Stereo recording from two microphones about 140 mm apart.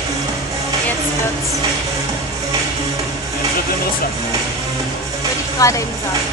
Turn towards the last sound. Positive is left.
turn(degrees=25)  # may be behind; listen again after turning